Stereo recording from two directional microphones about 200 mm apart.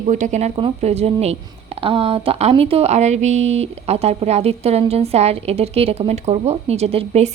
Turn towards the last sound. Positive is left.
turn(degrees=-30)  # may be behind; listen again after turning